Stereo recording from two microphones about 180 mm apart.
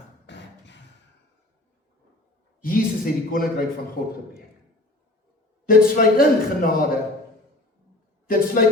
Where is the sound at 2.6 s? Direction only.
55° left (ahead or behind).